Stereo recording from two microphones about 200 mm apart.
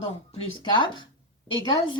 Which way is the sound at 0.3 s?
25° left (ahead or behind).